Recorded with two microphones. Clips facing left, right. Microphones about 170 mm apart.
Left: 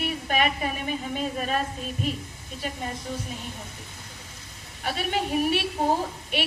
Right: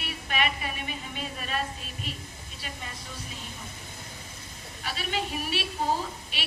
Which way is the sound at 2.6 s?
45° left (ahead or behind).